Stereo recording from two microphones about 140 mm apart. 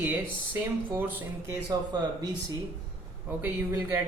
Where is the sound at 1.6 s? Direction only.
25° right (ahead or behind).